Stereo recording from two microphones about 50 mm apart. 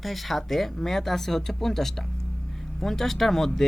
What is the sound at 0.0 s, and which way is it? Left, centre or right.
Speech, centre.